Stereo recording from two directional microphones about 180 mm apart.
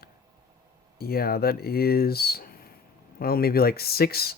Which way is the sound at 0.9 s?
60° left (ahead or behind).